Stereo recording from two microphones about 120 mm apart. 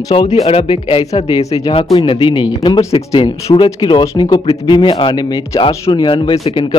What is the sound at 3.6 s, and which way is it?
A man's voice, 35° left (ahead or behind).